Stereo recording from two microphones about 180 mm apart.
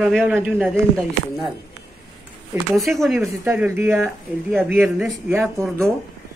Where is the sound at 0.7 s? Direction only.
5° left (ahead or behind).